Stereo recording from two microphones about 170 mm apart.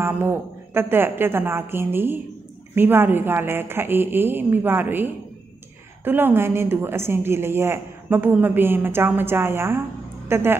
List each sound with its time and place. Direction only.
0.0 s a woman's voice: 15° right (ahead or behind)